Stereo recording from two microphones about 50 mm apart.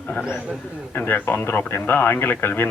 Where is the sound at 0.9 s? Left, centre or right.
Left.